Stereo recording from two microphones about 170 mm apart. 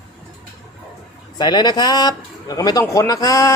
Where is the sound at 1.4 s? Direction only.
25° left (ahead or behind).